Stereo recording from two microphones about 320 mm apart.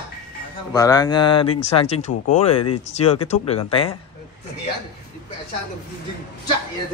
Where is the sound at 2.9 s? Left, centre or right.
Centre.